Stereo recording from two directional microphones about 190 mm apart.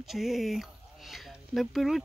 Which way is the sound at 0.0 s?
Centre (ahead or behind).